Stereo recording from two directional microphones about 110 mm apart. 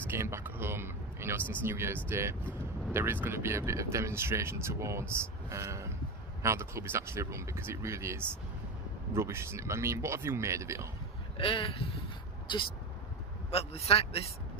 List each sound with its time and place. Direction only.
0.1 s speech: 20° right (ahead or behind)
11.3 s speech: 55° left (ahead or behind)
13.5 s a man's voice: 65° left (ahead or behind)